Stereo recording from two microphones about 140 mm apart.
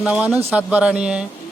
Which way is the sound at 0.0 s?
5° right (ahead or behind).